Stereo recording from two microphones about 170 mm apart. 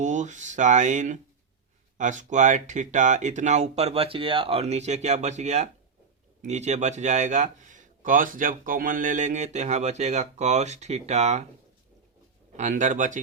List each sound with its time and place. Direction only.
0.0 s a man's voice: 45° right (ahead or behind)
12.5 s a man's voice: 45° right (ahead or behind)